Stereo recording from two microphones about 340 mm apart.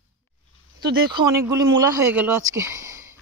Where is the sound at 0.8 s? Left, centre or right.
Right.